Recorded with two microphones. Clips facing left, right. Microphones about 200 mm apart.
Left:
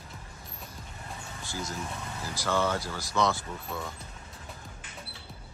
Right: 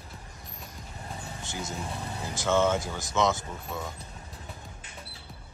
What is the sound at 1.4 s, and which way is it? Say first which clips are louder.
Speech: even; 20° right (ahead or behind).